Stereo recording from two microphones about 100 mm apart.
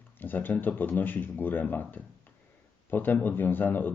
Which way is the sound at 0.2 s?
20° left (ahead or behind).